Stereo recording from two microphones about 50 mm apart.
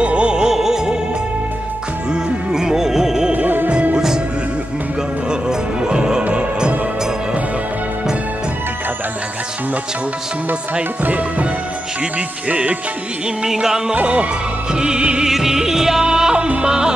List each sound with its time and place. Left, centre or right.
0.0 s music: right
2.5 s music: centre
3.3 s music: right
3.9 s music: centre
5.3 s music: centre
11.1 s music: right
12.4 s music: right
13.4 s music: centre
13.9 s music: right
15.2 s music: centre